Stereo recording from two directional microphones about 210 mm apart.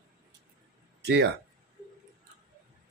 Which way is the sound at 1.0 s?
55° right (ahead or behind).